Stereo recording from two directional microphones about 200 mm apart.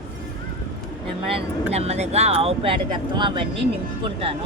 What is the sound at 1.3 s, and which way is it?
Speech, 30° right (ahead or behind).